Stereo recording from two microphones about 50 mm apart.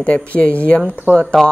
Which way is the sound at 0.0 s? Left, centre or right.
Left.